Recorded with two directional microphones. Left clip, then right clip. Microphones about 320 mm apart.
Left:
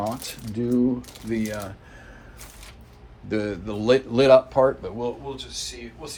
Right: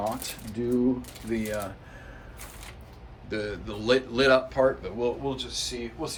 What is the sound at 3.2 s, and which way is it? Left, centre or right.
Speech, centre.